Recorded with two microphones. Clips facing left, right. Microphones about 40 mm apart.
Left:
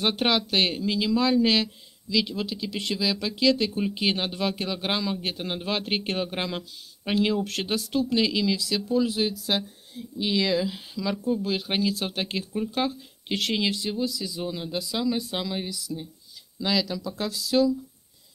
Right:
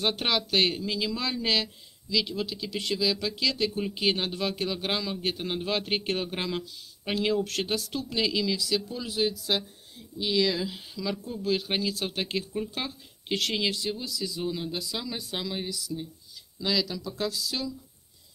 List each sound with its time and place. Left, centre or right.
0.0 s speech: left
7.4 s speech: left
8.2 s speech: centre
8.6 s speech: left
9.5 s speech: centre
13.3 s speech: left